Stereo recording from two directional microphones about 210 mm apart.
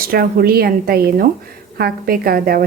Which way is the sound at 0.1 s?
45° right (ahead or behind).